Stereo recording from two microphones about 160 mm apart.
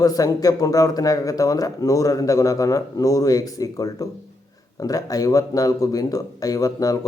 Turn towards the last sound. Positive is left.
turn(degrees=20)  # may be behind; listen again after turning